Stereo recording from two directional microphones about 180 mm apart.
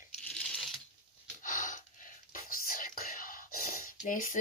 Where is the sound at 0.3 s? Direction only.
5° left (ahead or behind).